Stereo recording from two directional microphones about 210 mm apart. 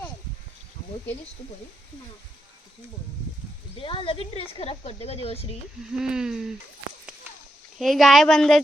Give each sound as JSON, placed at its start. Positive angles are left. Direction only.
{"t": 3.8, "sound": "speech", "side_deg": 25}
{"t": 5.9, "sound": "speech", "side_deg": -5}
{"t": 7.8, "sound": "speech", "side_deg": 0}